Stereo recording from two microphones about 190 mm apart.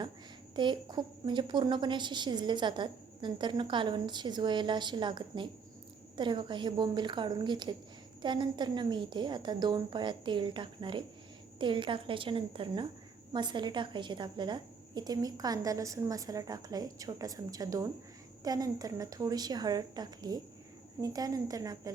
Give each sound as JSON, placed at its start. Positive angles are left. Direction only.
{"t": 0.5, "sound": "a woman's voice", "side_deg": -25}